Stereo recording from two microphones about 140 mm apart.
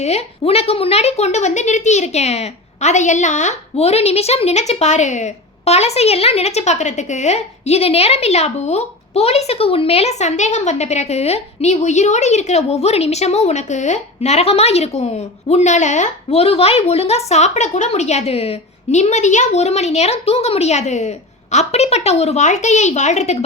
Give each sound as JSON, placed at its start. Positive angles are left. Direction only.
{"t": 0.0, "sound": "a woman's voice", "side_deg": 45}